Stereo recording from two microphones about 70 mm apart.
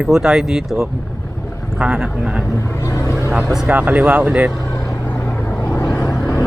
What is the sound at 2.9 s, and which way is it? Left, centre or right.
Vehicle, left.